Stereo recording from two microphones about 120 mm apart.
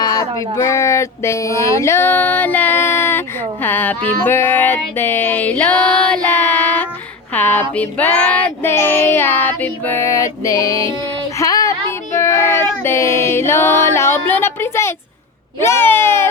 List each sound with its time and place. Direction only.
0.0 s speech: 35° left (ahead or behind); by 3.9 s 15° left (ahead or behind)
4.3 s child singing: 15° left (ahead or behind)
12.8 s a sound: 20° left (ahead or behind)
15.6 s speech: 20° left (ahead or behind)